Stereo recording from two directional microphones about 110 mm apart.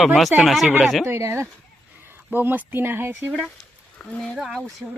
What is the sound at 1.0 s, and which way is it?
Speech, 25° right (ahead or behind).